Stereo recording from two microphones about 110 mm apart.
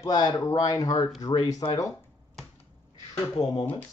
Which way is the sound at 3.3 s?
35° left (ahead or behind).